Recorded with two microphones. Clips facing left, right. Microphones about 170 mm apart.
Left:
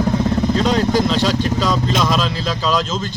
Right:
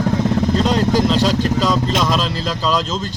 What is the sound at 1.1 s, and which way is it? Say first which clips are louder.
Speech: right 1 dB; 35° right (ahead or behind).